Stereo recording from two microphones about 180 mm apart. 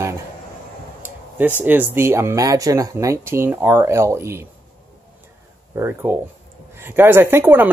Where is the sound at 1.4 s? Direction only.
10° right (ahead or behind).